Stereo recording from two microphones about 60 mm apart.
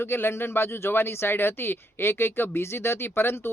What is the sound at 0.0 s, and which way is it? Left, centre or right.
Speech, left.